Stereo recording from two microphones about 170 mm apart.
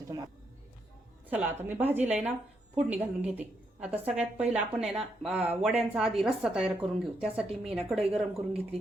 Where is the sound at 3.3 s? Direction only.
10° right (ahead or behind).